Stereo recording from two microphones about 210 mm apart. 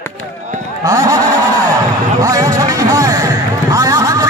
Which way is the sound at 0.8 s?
15° right (ahead or behind).